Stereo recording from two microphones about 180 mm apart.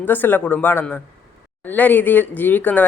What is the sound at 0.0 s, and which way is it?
Speech, 10° left (ahead or behind).